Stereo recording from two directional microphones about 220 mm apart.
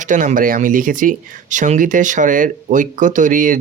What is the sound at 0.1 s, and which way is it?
Speech, 35° right (ahead or behind).